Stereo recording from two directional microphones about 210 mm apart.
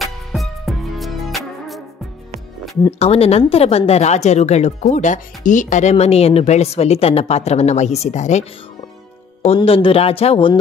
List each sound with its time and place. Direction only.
0.0 s music: centre (ahead or behind)
3.0 s a woman's voice: 30° left (ahead or behind)